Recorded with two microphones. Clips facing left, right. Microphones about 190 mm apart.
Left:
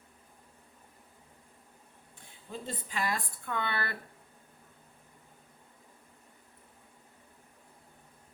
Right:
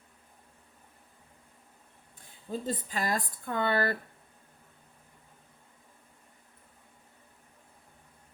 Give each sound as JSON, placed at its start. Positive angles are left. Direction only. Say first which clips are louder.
{"t": 2.5, "sound": "speech", "louder": "right 6 dB", "side_deg": -40}